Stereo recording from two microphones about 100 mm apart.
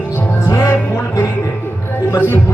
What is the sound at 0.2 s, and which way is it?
Music, 25° left (ahead or behind).